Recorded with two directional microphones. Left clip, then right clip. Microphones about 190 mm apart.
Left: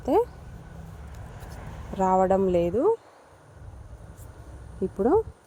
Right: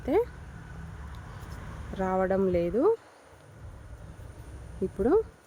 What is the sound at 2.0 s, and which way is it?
Speech, 5° left (ahead or behind).